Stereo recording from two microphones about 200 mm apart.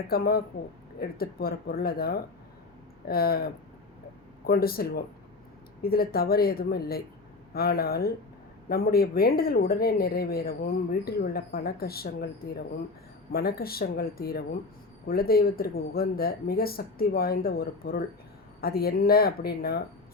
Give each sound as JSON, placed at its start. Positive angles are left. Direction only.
{"t": 0.1, "sound": "speech", "side_deg": 50}
{"t": 13.3, "sound": "speech", "side_deg": 50}